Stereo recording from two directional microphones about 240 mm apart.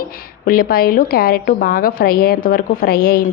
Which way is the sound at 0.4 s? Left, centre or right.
Left.